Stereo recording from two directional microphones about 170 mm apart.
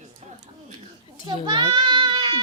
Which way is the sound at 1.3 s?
25° right (ahead or behind).